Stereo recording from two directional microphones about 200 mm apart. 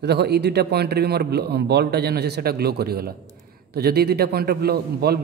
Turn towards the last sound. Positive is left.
turn(degrees=-50)  # may be behind; listen again after turning